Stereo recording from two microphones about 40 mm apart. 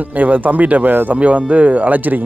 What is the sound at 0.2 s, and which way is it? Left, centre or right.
Speech, right.